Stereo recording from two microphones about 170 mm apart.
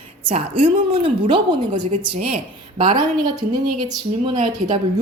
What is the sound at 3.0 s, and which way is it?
Speech, 25° right (ahead or behind).